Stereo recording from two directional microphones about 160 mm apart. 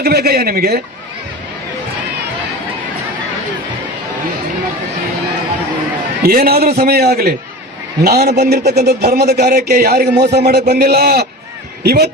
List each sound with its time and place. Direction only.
0.0 s a man's voice: 85° right
6.2 s a man's voice: 70° right (ahead or behind); by 12.1 s 90° right